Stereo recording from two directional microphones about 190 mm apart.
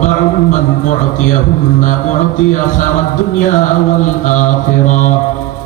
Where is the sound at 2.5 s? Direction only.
40° left (ahead or behind).